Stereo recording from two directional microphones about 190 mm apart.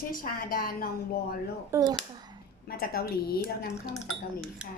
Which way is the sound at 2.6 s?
55° left (ahead or behind).